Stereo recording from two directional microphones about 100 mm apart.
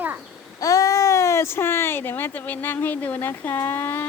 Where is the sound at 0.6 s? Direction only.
35° left (ahead or behind).